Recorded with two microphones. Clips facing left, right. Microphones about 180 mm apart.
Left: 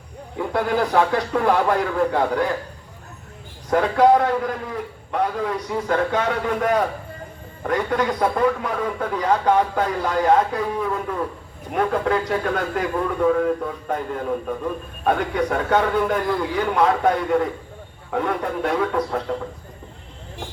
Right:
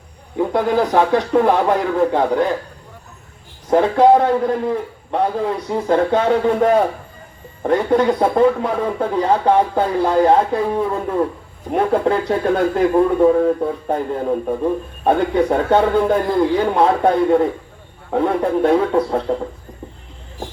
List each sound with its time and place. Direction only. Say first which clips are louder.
0.3 s speech: right 5 dB; 20° right (ahead or behind)
3.7 s speech: right 4 dB; 25° right (ahead or behind)